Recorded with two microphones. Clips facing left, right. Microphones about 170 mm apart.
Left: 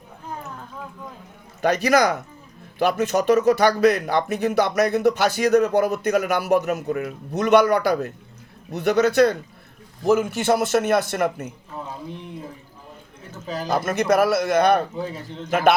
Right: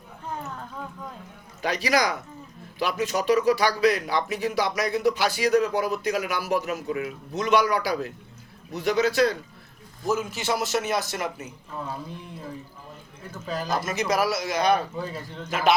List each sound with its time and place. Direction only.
1.6 s speech: 50° left (ahead or behind)
13.7 s speech: 55° left (ahead or behind)